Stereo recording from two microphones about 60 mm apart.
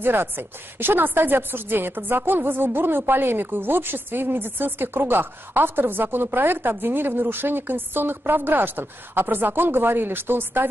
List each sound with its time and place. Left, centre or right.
0.0 s a woman's voice: right